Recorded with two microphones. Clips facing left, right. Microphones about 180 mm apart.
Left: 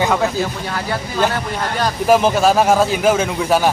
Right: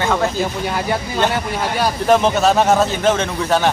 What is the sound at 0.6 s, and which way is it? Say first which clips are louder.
Speech: right 3 dB; 20° right (ahead or behind).